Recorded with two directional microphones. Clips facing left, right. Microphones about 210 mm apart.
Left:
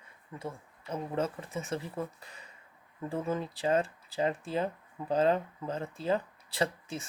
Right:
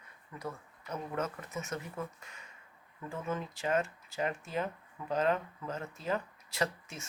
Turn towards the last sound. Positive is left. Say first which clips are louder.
# left 3 dB
turn(degrees=30)  # may be behind; listen again after turning